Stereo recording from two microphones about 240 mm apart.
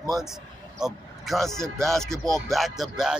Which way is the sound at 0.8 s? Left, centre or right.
Centre.